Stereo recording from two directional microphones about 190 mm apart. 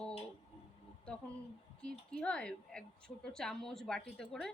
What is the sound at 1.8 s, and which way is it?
Speech, 5° left (ahead or behind).